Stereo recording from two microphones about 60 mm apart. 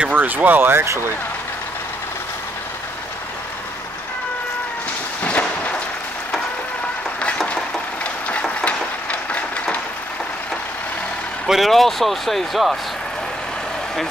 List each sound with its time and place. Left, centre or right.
0.1 s speech: right
5.2 s a sound: left
7.4 s vehicle: left
11.4 s speech: centre